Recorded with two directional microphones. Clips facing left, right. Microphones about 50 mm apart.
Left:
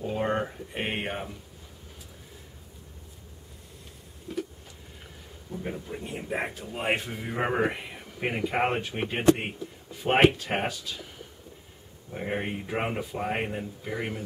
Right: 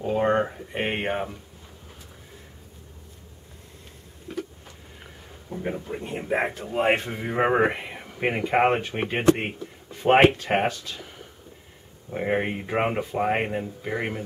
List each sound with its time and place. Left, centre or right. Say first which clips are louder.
0.0 s speech: right 6 dB; centre
5.5 s speech: right 5 dB; right
10.7 s speech: right 2 dB; centre
12.1 s speech: right 6 dB; right